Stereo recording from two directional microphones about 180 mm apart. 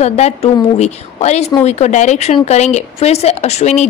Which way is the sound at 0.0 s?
35° left (ahead or behind).